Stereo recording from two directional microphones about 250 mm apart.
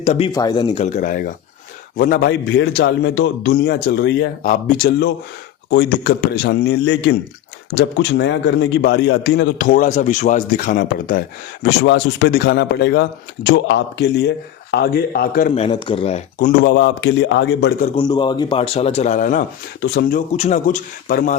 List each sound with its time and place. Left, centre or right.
0.0 s speech: left
0.3 s speech: centre; by 11.2 s left
11.8 s speech: left
16.5 s a man's voice: left
17.9 s speech: centre; by 21.3 s left